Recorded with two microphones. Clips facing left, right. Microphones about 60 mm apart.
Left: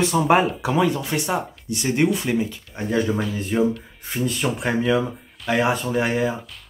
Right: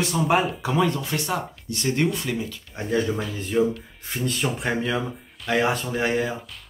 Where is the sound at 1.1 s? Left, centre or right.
Left.